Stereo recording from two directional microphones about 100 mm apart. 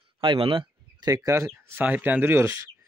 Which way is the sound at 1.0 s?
35° right (ahead or behind).